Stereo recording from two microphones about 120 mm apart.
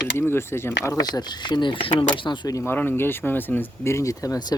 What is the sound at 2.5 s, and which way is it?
Speech, 20° left (ahead or behind).